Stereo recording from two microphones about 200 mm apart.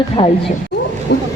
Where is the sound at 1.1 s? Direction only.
55° left (ahead or behind).